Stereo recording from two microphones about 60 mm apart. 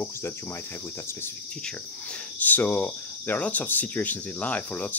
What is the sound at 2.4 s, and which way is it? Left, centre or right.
Speech, left.